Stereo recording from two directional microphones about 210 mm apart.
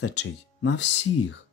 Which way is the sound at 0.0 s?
55° left (ahead or behind).